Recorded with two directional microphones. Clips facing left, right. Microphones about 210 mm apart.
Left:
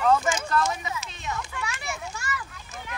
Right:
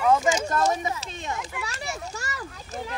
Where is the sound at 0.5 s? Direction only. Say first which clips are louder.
Right 2 dB; 40° right (ahead or behind).